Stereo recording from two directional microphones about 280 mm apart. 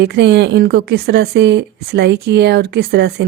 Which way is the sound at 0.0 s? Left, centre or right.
Right.